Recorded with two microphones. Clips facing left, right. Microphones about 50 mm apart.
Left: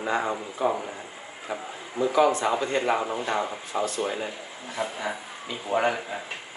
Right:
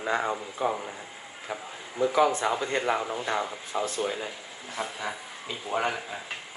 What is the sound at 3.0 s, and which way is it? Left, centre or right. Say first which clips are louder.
Speech: left 2 dB; left.